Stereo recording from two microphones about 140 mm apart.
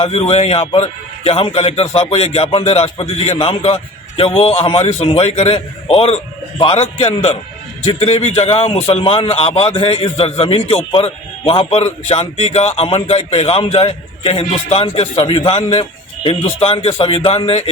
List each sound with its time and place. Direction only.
0.0 s a man's voice: 45° left (ahead or behind)